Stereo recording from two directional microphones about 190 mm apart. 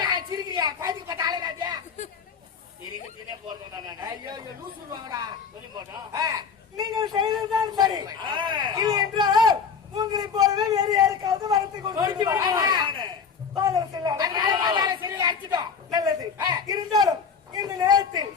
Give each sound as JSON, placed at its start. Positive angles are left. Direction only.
{"t": 0.0, "sound": "a sound", "side_deg": -20}
{"t": 3.8, "sound": "a man's voice", "side_deg": -20}
{"t": 6.7, "sound": "a man's voice", "side_deg": -20}